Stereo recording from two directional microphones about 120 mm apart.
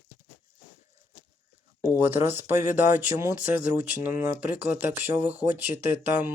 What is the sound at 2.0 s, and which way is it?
Speech, 20° right (ahead or behind).